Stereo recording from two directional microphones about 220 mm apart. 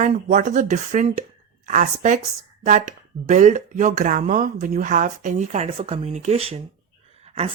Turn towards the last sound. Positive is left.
turn(degrees=-30)  # may be behind; listen again after turning